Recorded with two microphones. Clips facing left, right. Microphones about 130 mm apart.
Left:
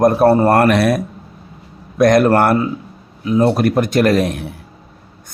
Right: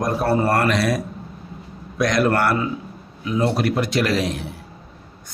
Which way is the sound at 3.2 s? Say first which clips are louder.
Left 6 dB; 40° left (ahead or behind).